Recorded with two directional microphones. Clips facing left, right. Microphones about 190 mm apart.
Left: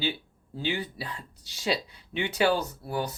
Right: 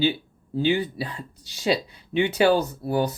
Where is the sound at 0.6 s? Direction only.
20° right (ahead or behind).